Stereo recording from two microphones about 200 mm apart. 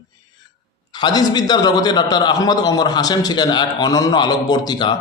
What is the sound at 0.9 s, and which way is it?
A man's voice, 20° left (ahead or behind).